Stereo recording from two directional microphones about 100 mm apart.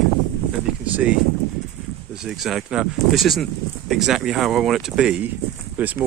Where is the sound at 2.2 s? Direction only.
5° right (ahead or behind).